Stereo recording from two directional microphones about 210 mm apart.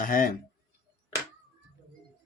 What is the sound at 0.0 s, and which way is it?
Speech, 40° left (ahead or behind).